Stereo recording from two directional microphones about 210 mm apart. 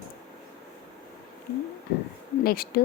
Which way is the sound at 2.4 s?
45° left (ahead or behind).